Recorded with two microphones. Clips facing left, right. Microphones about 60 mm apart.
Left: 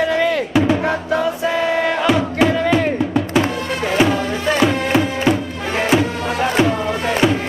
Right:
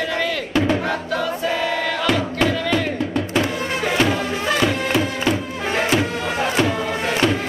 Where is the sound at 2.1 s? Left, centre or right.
Centre.